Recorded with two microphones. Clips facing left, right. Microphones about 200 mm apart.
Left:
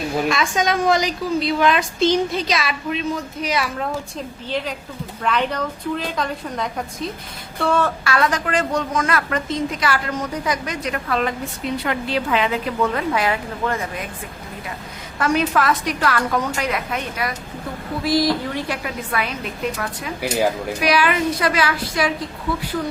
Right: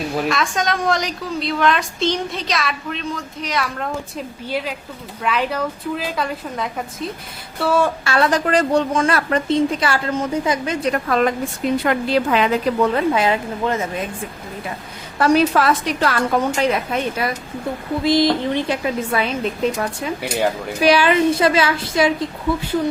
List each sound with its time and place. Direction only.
0.1 s a woman's voice: centre (ahead or behind)
4.4 s a woman's voice: 10° right (ahead or behind)
8.0 s a woman's voice: 30° right (ahead or behind)
10.9 s a woman's voice: 45° right (ahead or behind)
13.1 s a woman's voice: 25° right (ahead or behind)
15.2 s a woman's voice: 35° right (ahead or behind)
20.2 s a woman's voice: centre (ahead or behind)
20.8 s a woman's voice: 30° right (ahead or behind)